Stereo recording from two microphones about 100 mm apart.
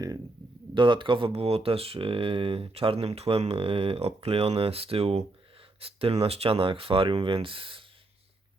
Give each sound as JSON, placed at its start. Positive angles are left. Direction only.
{"t": 0.7, "sound": "speech", "side_deg": -55}